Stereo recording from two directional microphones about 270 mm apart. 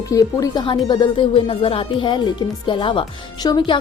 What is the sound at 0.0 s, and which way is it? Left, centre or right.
Speech, centre.